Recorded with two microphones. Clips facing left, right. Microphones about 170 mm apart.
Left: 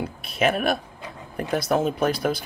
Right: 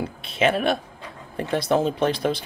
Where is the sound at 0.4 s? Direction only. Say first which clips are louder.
Right 1 dB; 30° right (ahead or behind).